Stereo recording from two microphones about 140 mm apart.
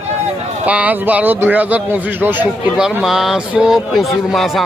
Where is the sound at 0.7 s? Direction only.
10° right (ahead or behind).